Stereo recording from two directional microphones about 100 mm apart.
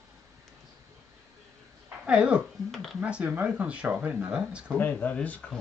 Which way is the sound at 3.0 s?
10° right (ahead or behind).